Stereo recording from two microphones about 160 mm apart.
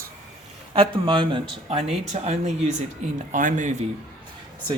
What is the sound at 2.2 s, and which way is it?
Speech, 45° right (ahead or behind).